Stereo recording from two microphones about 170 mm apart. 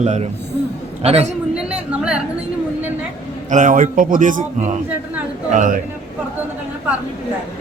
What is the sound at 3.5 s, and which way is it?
A man's voice, 50° right (ahead or behind).